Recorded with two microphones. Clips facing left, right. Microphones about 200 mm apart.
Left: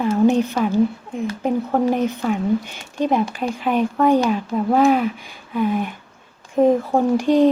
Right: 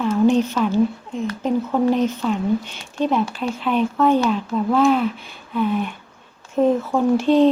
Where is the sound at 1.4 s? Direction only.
55° left (ahead or behind).